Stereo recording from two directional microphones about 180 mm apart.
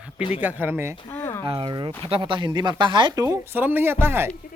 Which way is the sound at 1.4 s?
30° right (ahead or behind).